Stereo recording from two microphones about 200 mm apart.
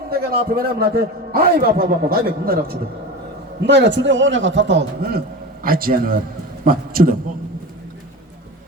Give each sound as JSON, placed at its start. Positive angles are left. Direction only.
{"t": 0.1, "sound": "a man's voice", "side_deg": -50}
{"t": 3.6, "sound": "a man's voice", "side_deg": -60}